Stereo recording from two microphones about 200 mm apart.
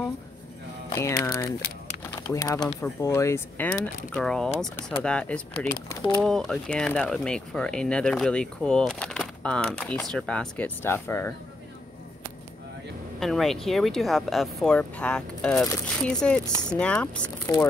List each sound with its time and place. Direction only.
0.9 s speech: 15° left (ahead or behind)
6.2 s speech: centre (ahead or behind)
13.2 s speech: centre (ahead or behind)